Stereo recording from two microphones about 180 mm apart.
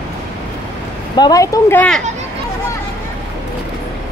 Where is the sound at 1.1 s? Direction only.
20° left (ahead or behind).